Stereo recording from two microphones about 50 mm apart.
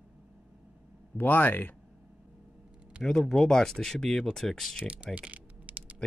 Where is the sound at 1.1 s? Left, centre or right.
Left.